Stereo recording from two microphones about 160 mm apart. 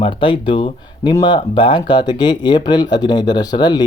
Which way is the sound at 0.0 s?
30° left (ahead or behind).